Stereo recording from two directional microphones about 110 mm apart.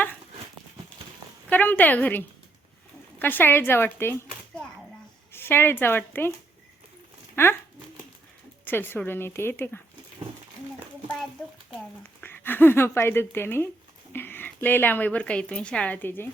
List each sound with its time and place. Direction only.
1.5 s a woman's voice: 15° left (ahead or behind)
5.3 s speech: 20° left (ahead or behind)
7.4 s speech: 20° left (ahead or behind)
8.6 s speech: 20° left (ahead or behind)
11.4 s a child's voice: 10° left (ahead or behind)